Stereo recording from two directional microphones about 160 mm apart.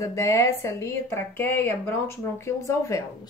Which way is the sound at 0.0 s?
20° left (ahead or behind).